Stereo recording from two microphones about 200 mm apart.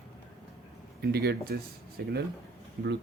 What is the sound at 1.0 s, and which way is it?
Speech, 55° right (ahead or behind).